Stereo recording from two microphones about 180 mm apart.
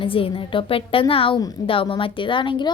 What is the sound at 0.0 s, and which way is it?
A woman's voice, 30° left (ahead or behind).